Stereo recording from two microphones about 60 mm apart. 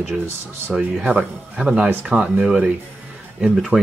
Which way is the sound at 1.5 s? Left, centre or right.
Centre.